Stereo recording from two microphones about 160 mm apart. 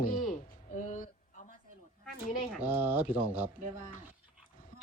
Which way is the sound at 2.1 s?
10° right (ahead or behind).